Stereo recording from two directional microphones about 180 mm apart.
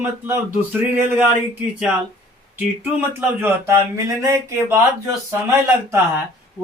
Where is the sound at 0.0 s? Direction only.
10° right (ahead or behind).